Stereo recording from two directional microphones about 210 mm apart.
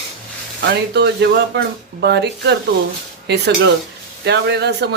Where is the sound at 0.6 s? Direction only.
55° right (ahead or behind).